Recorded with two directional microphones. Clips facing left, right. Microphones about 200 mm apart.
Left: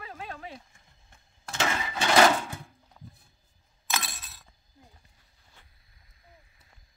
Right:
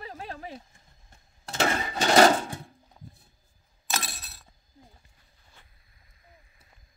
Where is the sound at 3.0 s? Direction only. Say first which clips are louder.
Even; 15° right (ahead or behind).